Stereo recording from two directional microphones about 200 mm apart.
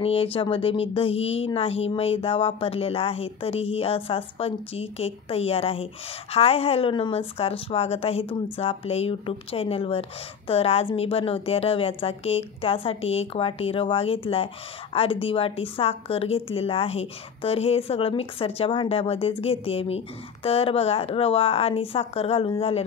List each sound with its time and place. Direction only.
0.0 s a woman's voice: 30° left (ahead or behind)